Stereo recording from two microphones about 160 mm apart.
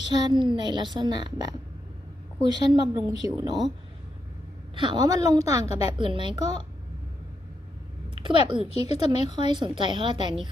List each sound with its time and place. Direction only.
0.1 s a woman's voice: 25° right (ahead or behind)
4.7 s a woman's voice: 30° right (ahead or behind)
5.5 s a woman's voice: 40° left (ahead or behind)
6.0 s speech: 30° right (ahead or behind)
8.1 s a sound: 30° right (ahead or behind)
8.7 s a woman's voice: 40° left (ahead or behind)
9.5 s a woman's voice: 30° right (ahead or behind)